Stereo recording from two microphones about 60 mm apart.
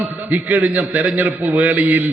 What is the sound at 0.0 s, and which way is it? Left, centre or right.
A man's voice, right.